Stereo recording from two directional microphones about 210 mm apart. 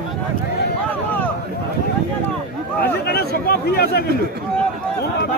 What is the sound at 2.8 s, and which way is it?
Speech, 50° left (ahead or behind).